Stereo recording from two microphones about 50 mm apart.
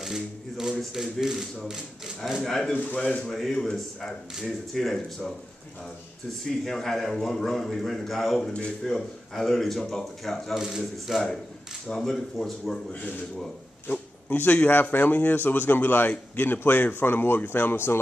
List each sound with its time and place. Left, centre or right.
0.0 s speech: centre
2.3 s a man's voice: centre
2.7 s speech: left
3.2 s a man's voice: centre
6.6 s a man's voice: centre
8.4 s speech: centre
8.8 s a man's voice: centre
10.5 s a man's voice: centre
13.8 s speech: left